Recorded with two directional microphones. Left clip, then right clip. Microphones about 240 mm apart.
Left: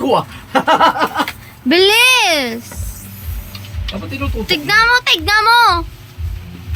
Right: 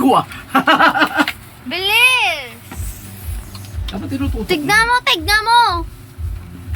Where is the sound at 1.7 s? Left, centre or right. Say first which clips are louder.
Left 9 dB; left.